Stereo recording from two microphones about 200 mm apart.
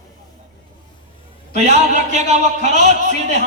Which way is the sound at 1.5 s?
35° right (ahead or behind).